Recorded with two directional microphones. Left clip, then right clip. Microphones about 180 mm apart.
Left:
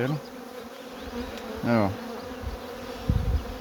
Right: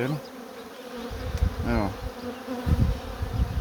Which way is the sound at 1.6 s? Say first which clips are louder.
Left 4 dB; 40° left (ahead or behind).